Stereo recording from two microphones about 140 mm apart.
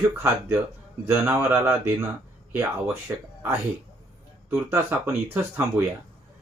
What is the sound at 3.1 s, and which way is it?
Speech, 15° right (ahead or behind).